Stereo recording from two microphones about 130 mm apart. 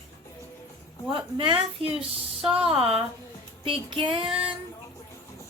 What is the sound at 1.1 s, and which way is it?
A woman's voice, 40° right (ahead or behind).